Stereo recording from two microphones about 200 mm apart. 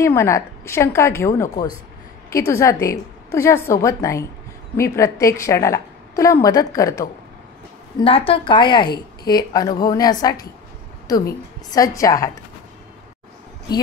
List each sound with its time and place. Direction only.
0.0 s a woman's voice: 15° left (ahead or behind)
8.0 s a woman's voice: 30° left (ahead or behind)